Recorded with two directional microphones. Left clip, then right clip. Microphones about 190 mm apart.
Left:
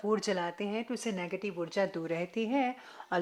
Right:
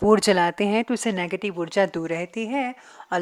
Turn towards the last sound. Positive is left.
turn(degrees=-25)  # may be behind; listen again after turning